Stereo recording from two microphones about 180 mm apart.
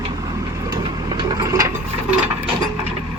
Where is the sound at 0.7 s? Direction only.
25° right (ahead or behind).